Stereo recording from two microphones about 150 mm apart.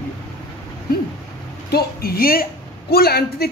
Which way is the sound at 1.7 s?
90° left.